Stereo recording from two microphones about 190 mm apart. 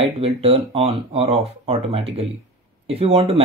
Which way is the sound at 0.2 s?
30° right (ahead or behind).